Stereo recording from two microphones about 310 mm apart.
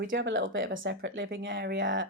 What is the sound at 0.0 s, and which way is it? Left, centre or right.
Speech, right.